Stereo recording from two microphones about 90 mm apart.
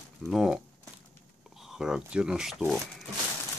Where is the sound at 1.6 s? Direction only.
5° right (ahead or behind).